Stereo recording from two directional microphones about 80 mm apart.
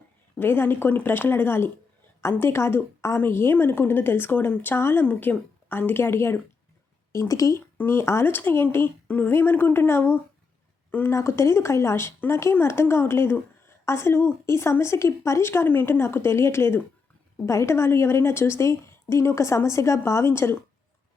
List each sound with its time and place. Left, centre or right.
0.3 s a woman's voice: left
7.1 s a woman's voice: left
7.8 s a woman's voice: left